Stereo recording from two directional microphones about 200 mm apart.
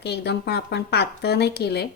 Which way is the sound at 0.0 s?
55° left (ahead or behind).